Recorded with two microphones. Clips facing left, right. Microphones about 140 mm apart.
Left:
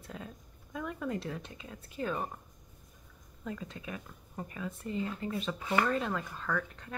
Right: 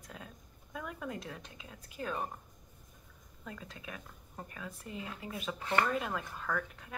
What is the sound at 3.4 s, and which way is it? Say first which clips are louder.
Speech: left 6 dB; centre (ahead or behind).